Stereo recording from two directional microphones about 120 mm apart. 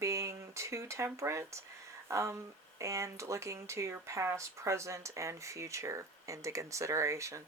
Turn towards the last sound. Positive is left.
turn(degrees=-25)  # may be behind; listen again after turning